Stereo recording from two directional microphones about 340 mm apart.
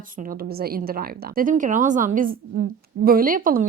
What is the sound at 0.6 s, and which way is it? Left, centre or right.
Speech, right.